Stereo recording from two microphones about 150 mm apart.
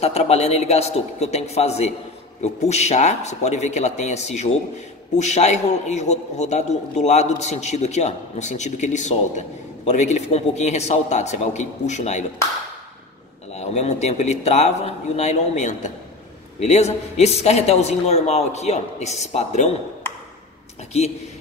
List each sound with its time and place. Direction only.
0.0 s a man's voice: 45° left (ahead or behind)
13.6 s a man's voice: 45° left (ahead or behind)